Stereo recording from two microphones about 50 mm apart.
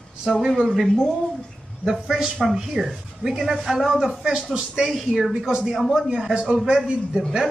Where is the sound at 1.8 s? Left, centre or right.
Centre.